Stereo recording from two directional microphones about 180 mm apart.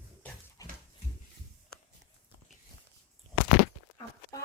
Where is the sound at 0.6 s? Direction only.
20° left (ahead or behind).